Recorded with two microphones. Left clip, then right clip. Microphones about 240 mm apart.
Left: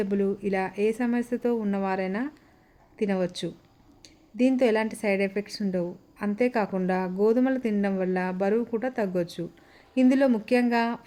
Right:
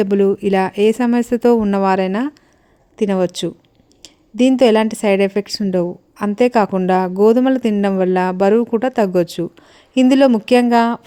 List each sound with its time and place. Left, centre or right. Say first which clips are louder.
0.0 s a woman's voice: right 12 dB; right